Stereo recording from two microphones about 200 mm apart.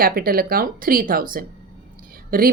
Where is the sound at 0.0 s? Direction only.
50° right (ahead or behind).